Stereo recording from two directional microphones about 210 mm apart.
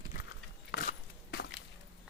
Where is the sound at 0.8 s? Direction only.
45° left (ahead or behind).